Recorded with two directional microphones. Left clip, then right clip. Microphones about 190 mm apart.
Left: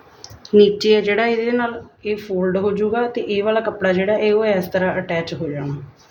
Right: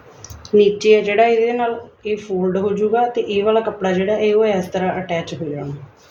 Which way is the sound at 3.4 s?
45° left (ahead or behind).